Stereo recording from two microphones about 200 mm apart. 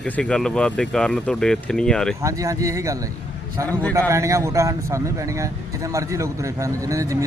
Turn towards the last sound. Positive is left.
turn(degrees=-15)  # may be behind; listen again after turning